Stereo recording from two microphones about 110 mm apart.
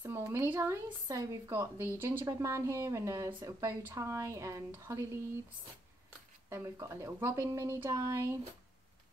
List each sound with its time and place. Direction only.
0.0 s a woman's voice: 25° right (ahead or behind)
6.5 s a woman's voice: 25° right (ahead or behind)